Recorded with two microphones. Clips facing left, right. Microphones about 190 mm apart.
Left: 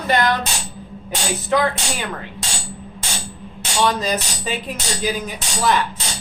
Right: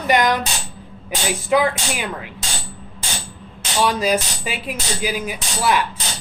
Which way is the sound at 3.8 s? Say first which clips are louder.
Right 2 dB; 10° right (ahead or behind).